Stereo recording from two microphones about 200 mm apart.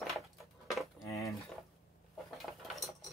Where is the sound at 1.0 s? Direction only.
15° left (ahead or behind).